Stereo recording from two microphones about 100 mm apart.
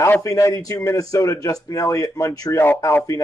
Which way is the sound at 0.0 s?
30° left (ahead or behind).